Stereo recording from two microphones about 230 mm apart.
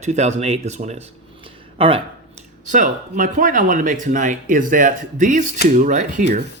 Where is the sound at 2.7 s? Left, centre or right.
Right.